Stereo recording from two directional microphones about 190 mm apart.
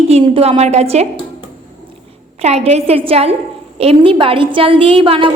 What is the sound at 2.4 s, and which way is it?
A woman's voice, 35° right (ahead or behind).